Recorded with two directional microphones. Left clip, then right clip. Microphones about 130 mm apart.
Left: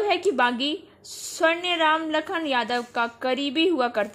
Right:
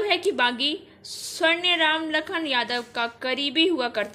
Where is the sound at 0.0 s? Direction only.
40° left (ahead or behind).